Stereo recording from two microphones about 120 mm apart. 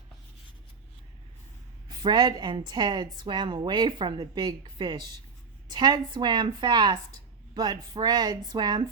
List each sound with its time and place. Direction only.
1.9 s a woman's voice: 40° right (ahead or behind)